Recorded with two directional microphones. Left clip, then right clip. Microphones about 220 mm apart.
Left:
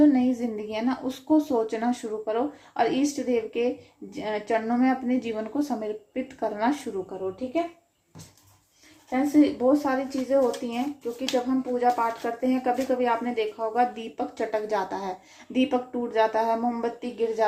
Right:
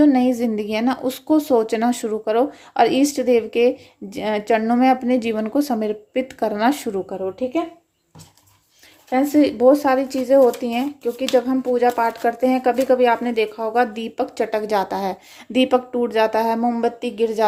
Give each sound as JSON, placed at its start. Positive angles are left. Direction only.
{"t": 0.0, "sound": "speech", "side_deg": -45}
{"t": 9.0, "sound": "speech", "side_deg": -45}